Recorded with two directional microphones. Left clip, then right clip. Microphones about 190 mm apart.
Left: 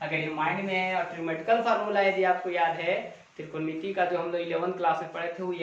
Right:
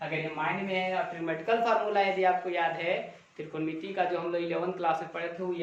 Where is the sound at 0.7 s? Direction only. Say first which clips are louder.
Left 2 dB; 10° right (ahead or behind).